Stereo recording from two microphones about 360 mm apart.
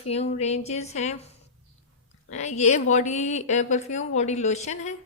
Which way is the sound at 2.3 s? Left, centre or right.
Centre.